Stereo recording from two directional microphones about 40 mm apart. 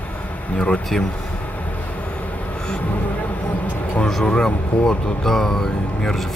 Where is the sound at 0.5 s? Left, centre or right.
Left.